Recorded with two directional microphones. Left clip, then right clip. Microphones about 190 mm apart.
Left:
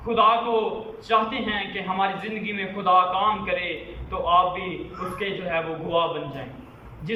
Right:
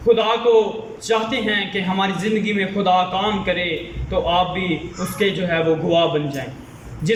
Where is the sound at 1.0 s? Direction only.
30° right (ahead or behind).